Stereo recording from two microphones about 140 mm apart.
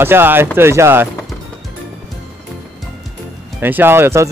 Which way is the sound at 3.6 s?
15° right (ahead or behind).